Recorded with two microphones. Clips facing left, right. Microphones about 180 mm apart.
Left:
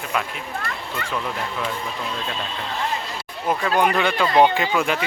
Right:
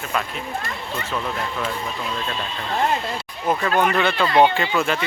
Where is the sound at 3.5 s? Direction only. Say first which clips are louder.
Even; 5° left (ahead or behind).